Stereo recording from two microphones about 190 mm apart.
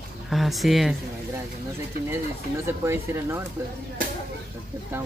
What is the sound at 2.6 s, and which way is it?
Speech, 15° right (ahead or behind).